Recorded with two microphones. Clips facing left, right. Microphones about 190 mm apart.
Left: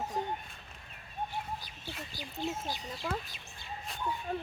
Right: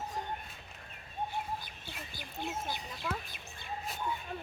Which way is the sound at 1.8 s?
55° right (ahead or behind).